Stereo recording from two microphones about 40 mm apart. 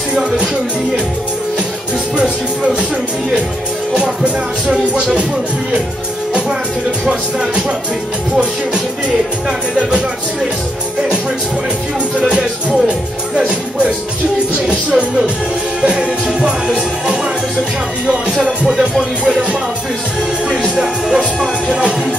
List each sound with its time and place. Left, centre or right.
2.1 s speech: right
3.9 s speech: right
7.1 s speech: right
12.2 s speech: right
14.5 s speech: right
18.4 s speech: right
20.7 s speech: centre
21.6 s speech: right